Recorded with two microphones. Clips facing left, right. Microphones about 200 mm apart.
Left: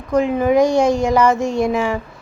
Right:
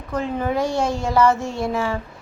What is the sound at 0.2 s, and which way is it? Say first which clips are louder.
A woman's voice: left 8 dB; 15° left (ahead or behind).